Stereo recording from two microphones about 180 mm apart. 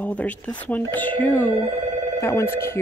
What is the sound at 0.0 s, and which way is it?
Speech, 10° left (ahead or behind).